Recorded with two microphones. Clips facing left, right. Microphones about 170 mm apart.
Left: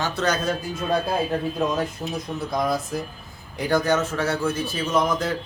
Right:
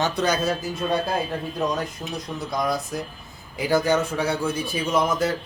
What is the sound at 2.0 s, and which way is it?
Speech, 15° left (ahead or behind).